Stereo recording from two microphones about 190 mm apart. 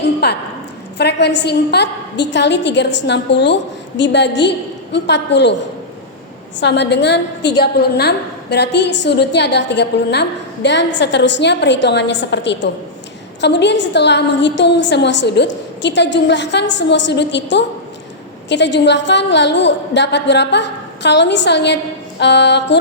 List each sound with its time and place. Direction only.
0.2 s a woman's voice: 60° left (ahead or behind)
6.6 s a woman's voice: 65° left (ahead or behind)